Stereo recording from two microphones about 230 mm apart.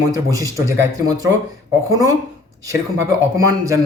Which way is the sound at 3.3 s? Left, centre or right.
Centre.